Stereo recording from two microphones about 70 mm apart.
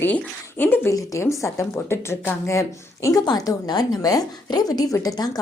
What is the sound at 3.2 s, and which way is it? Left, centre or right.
A woman's voice, left.